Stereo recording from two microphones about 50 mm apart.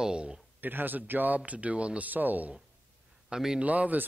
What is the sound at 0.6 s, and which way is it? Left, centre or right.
Speech, right.